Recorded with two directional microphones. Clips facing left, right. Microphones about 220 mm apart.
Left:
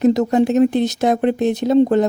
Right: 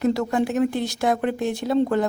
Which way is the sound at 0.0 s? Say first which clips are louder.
Left 7 dB; 20° left (ahead or behind).